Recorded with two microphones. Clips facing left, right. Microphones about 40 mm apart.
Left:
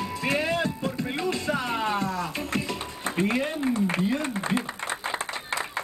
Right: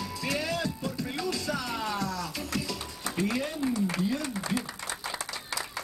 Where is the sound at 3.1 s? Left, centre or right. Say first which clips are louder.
Left 4 dB; left.